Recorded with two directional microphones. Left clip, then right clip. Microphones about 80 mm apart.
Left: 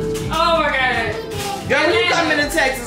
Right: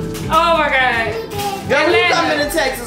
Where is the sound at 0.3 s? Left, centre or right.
Right.